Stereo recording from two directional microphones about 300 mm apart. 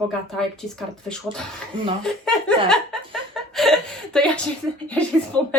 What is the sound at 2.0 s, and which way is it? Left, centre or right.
Chuckle, centre.